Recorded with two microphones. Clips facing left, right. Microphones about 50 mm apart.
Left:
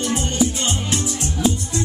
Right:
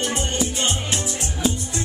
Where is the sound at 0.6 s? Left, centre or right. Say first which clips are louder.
Left 1 dB; right.